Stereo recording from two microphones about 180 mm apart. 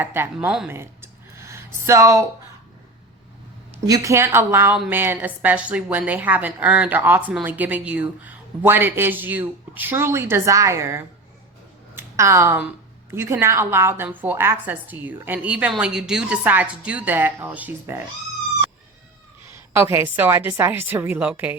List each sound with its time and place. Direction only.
0.0 s a woman's voice: 10° right (ahead or behind)
0.7 s a sound: 15° right (ahead or behind)
3.8 s a woman's voice: 20° right (ahead or behind)
19.7 s a woman's voice: 15° right (ahead or behind)